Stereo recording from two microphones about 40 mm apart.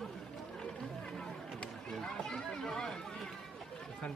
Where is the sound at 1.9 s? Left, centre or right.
Centre.